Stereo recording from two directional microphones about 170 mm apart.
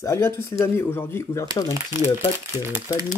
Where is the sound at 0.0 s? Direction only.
15° left (ahead or behind).